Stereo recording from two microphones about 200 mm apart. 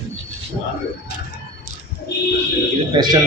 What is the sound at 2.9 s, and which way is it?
Speech, 20° right (ahead or behind).